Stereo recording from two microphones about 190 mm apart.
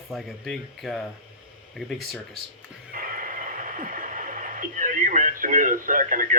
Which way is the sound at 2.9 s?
45° right (ahead or behind).